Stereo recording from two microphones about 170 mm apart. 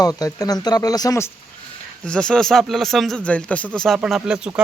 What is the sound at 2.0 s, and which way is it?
Speech, 5° left (ahead or behind).